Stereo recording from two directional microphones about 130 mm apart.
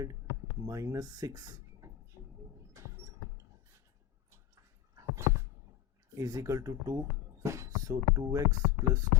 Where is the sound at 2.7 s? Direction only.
20° right (ahead or behind).